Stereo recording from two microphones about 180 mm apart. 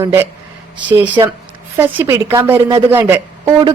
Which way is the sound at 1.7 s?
10° right (ahead or behind).